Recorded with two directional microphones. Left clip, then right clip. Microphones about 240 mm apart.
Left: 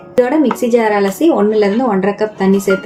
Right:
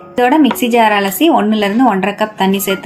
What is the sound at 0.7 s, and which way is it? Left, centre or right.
Speech, right.